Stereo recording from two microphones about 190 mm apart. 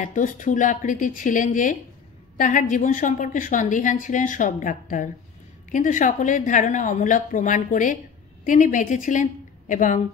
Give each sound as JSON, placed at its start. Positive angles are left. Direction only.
{"t": 0.0, "sound": "a woman's voice", "side_deg": 45}